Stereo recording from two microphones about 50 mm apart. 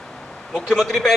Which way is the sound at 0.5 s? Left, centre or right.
Centre.